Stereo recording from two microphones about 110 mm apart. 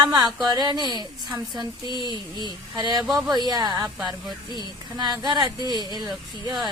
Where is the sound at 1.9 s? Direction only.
40° left (ahead or behind).